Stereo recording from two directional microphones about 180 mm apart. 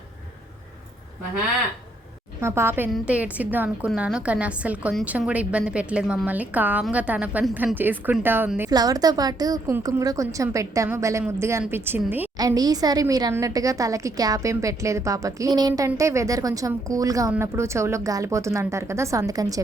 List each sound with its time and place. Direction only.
2.4 s a woman's voice: 15° right (ahead or behind)